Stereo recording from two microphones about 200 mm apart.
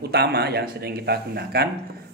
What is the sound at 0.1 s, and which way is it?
A man's voice, 55° right (ahead or behind).